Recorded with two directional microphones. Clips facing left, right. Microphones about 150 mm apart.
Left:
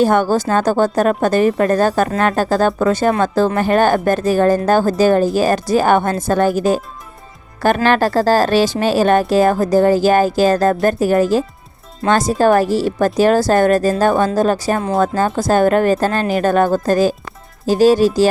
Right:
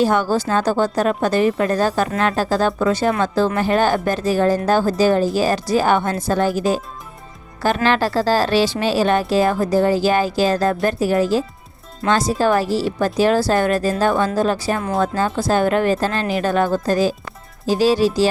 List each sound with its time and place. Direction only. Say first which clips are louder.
0.0 s speech: left 3 dB; 50° left (ahead or behind)
7.8 s speech: left 3 dB; 50° left (ahead or behind)